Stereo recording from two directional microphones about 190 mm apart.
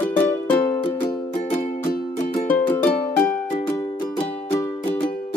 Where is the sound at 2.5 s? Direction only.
10° left (ahead or behind).